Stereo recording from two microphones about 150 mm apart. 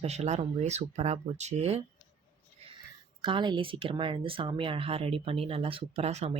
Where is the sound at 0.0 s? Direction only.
45° right (ahead or behind).